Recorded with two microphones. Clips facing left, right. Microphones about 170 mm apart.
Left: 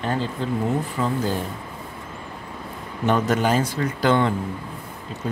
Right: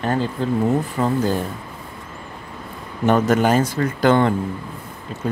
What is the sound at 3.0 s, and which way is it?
Speech, 50° right (ahead or behind).